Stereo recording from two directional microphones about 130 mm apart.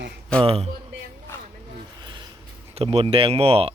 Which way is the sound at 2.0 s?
35° right (ahead or behind).